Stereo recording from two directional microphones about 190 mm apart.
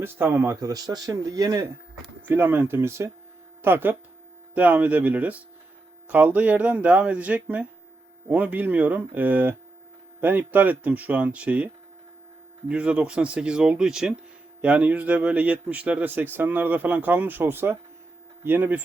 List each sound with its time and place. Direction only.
0.0 s a man's voice: 10° right (ahead or behind)